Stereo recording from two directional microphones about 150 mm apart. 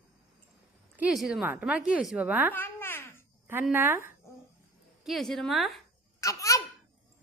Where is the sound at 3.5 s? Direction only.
15° right (ahead or behind).